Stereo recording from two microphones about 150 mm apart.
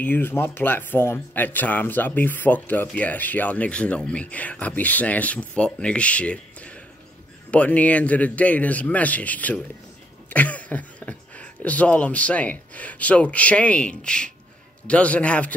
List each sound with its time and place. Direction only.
0.0 s speech: 15° left (ahead or behind)